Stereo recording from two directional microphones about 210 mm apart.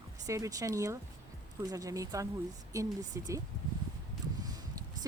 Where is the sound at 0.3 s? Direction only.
15° right (ahead or behind).